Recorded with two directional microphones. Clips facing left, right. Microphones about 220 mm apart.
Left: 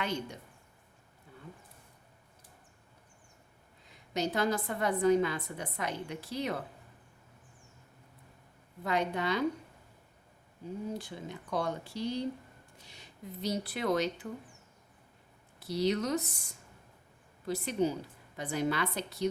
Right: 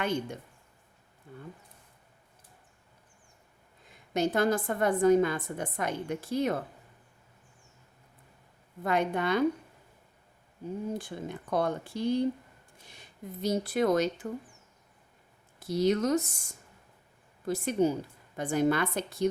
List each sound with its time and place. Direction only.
0.0 s a woman's voice: 50° right (ahead or behind)
4.1 s a woman's voice: 50° right (ahead or behind)
8.8 s a woman's voice: 50° right (ahead or behind)
10.9 s a woman's voice: 50° right (ahead or behind)
15.6 s a woman's voice: 50° right (ahead or behind)